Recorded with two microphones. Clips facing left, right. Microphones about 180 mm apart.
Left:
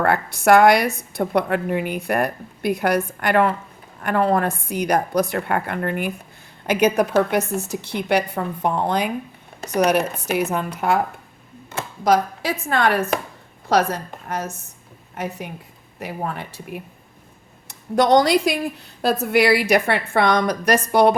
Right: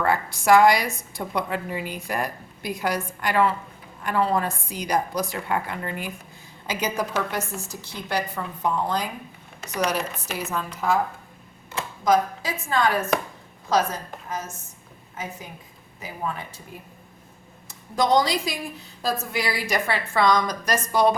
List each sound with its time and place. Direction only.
0.0 s a woman's voice: 65° left (ahead or behind)
12.0 s a woman's voice: 70° left (ahead or behind)